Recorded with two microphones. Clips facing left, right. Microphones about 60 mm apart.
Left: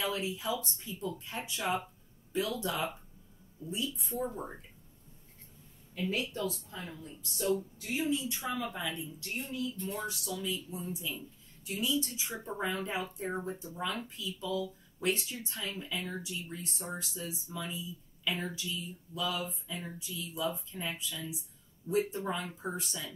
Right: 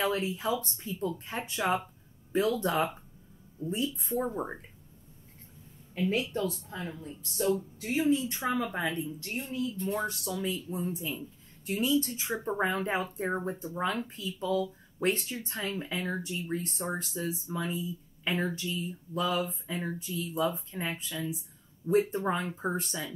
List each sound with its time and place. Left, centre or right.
0.0 s speech: right
6.3 s speech: right
9.8 s speech: right